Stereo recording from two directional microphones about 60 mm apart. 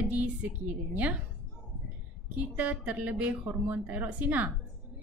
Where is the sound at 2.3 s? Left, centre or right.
Right.